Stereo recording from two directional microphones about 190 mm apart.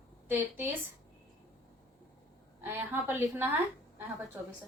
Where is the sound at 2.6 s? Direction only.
10° right (ahead or behind).